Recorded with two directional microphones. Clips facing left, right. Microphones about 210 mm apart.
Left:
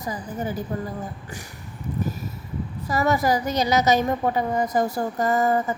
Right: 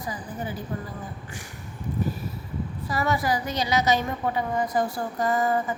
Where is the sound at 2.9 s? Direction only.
40° left (ahead or behind).